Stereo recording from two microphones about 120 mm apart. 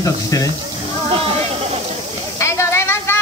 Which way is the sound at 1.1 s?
55° right (ahead or behind).